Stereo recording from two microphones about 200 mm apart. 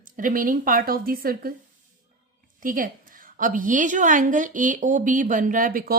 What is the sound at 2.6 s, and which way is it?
A woman's voice, 45° right (ahead or behind).